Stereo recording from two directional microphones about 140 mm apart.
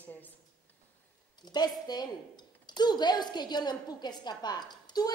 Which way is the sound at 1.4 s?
30° left (ahead or behind).